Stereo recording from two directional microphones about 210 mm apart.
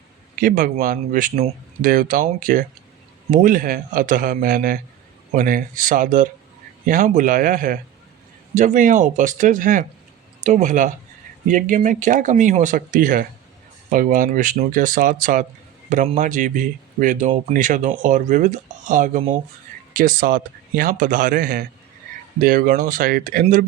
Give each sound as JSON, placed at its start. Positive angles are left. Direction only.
{"t": 0.3, "sound": "speech", "side_deg": -40}